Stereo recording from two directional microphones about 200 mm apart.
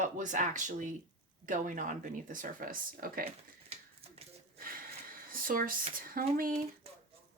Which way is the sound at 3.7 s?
30° right (ahead or behind).